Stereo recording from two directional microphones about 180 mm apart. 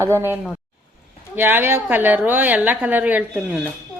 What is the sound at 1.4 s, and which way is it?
A woman's voice, 10° right (ahead or behind).